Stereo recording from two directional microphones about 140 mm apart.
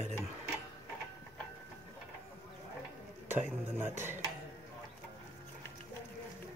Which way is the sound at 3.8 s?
15° right (ahead or behind).